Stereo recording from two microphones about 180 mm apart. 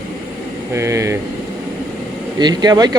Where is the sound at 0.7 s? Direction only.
15° right (ahead or behind).